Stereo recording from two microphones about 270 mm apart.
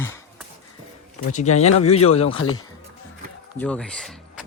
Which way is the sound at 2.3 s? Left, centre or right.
Left.